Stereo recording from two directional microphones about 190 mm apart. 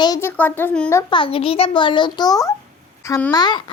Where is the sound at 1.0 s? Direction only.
25° left (ahead or behind).